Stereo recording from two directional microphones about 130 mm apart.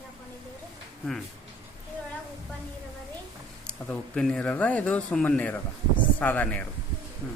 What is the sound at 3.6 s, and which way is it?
Speech, 5° left (ahead or behind).